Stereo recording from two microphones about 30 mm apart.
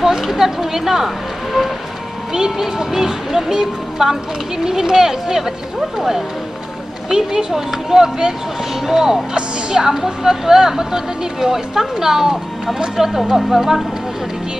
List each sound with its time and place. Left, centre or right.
0.2 s speech: centre
7.1 s a woman's voice: right